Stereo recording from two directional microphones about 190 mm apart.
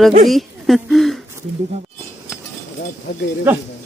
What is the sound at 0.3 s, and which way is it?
Speech, centre (ahead or behind).